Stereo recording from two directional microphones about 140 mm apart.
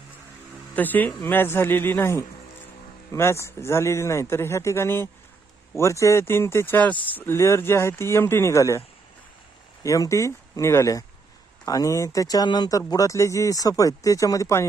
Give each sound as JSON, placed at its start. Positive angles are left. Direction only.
{"t": 0.8, "sound": "speech", "side_deg": 10}
{"t": 9.8, "sound": "speech", "side_deg": 25}